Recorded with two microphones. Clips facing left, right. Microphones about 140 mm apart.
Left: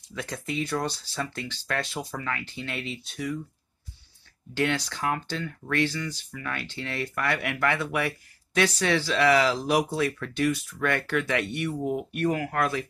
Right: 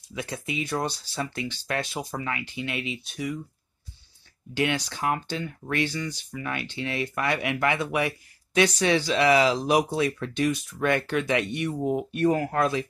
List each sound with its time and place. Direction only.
0.1 s speech: 15° right (ahead or behind)
4.6 s speech: 15° right (ahead or behind)